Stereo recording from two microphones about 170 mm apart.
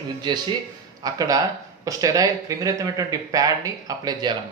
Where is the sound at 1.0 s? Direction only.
20° right (ahead or behind).